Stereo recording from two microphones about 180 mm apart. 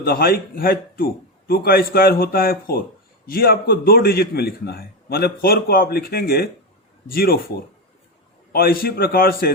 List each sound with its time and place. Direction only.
0.0 s a man's voice: 55° left (ahead or behind)
8.5 s a man's voice: 55° left (ahead or behind)